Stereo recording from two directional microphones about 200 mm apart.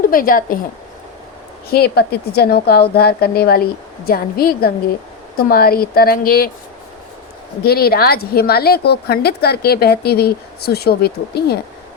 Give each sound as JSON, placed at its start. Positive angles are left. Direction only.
{"t": 0.1, "sound": "a woman's voice", "side_deg": 45}
{"t": 1.7, "sound": "a woman's voice", "side_deg": 55}
{"t": 7.6, "sound": "a woman's voice", "side_deg": 50}